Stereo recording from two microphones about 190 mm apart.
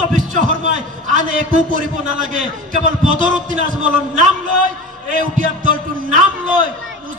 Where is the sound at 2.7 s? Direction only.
45° right (ahead or behind).